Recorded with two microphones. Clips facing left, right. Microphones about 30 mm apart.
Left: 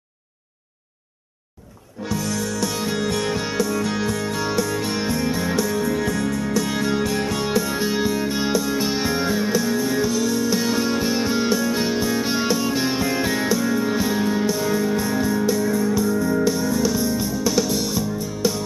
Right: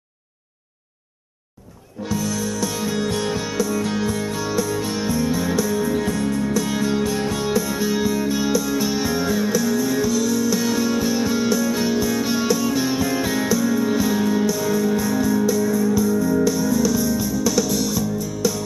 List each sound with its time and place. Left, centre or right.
2.0 s music: left
3.0 s music: left
3.3 s music: left
6.5 s music: left
7.7 s music: left
15.4 s music: left